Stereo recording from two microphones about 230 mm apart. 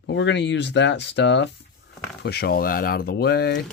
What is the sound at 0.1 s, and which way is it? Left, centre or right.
Speech, left.